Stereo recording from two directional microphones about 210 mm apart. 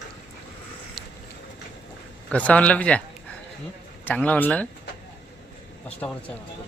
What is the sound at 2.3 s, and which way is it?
Speech, 5° left (ahead or behind).